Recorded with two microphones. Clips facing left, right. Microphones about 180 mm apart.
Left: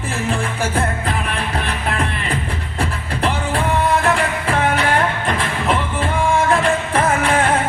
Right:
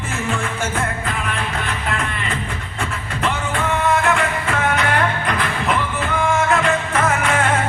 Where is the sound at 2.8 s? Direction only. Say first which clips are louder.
Left 3 dB; 35° left (ahead or behind).